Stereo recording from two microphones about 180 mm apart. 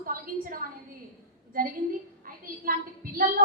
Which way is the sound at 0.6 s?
50° right (ahead or behind).